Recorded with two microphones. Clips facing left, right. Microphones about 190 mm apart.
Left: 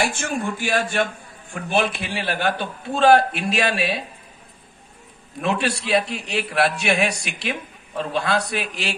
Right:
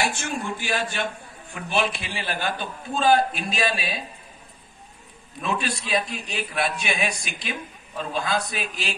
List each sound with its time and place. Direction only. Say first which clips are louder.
0.2 s a man's voice: left 4 dB; 50° left (ahead or behind); by 4.0 s 65° left (ahead or behind)
5.4 s a man's voice: left 5 dB; 75° left (ahead or behind)